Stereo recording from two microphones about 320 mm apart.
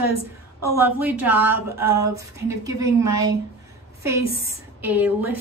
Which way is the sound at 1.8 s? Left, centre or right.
Right.